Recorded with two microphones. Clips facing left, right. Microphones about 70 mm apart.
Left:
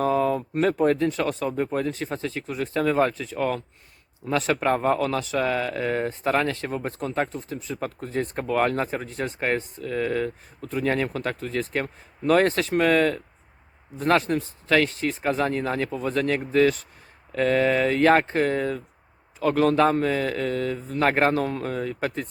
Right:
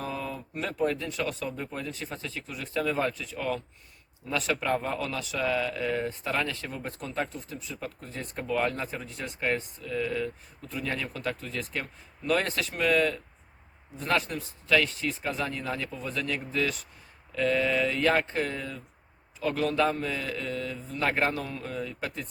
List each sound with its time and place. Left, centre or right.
0.0 s a man's voice: left